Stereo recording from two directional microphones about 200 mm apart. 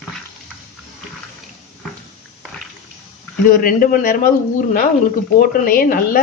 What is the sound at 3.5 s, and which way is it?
Speech, 45° left (ahead or behind).